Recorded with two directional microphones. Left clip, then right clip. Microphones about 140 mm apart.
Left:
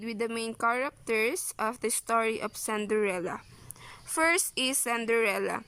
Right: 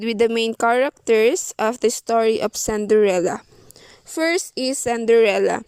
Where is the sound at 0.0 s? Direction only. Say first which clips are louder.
Right 14 dB; 85° right; by 3.4 s 50° right (ahead or behind).